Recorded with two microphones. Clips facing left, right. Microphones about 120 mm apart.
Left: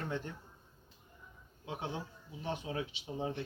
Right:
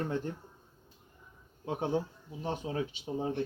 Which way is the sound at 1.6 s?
45° right (ahead or behind).